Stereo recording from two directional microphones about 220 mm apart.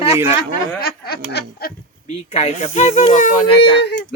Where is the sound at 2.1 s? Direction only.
30° left (ahead or behind).